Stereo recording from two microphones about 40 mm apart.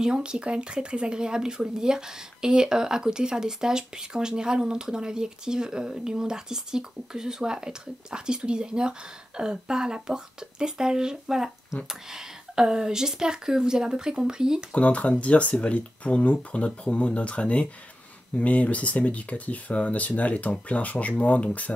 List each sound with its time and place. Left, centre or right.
0.0 s speech: right
14.7 s speech: left